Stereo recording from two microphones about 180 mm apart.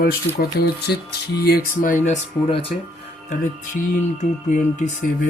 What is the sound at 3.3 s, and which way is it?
Speech, 50° left (ahead or behind).